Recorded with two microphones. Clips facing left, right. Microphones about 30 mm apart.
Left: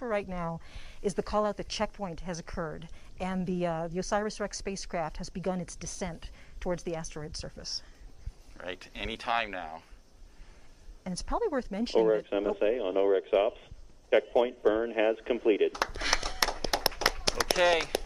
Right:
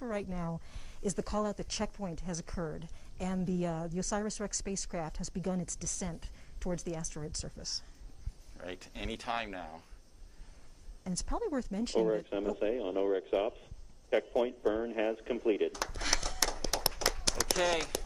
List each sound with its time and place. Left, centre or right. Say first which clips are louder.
0.0 s speech: left 5 dB; left
11.1 s speech: left 5 dB; left